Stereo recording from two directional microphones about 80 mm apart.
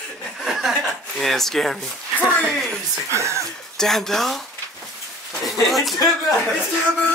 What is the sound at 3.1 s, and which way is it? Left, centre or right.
Speech, right.